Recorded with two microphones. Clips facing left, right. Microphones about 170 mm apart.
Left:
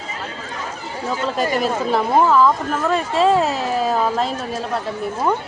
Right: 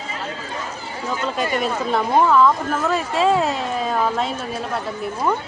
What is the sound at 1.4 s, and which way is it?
Speech, centre (ahead or behind).